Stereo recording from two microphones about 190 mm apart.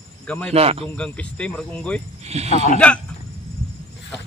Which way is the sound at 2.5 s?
35° left (ahead or behind).